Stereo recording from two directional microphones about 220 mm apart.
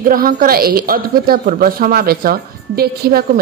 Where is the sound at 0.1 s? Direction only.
40° right (ahead or behind).